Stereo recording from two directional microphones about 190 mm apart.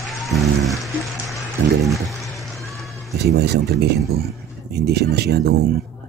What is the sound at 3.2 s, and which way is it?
Speech, 60° right (ahead or behind).